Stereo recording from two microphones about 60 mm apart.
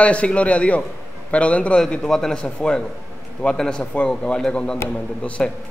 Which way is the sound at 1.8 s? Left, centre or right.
Centre.